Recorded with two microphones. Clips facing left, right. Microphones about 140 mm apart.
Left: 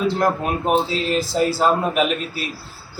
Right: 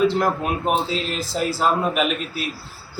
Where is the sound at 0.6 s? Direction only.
Centre (ahead or behind).